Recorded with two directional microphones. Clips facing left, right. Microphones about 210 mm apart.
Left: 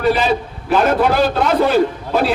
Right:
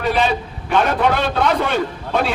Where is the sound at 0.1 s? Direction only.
Centre (ahead or behind).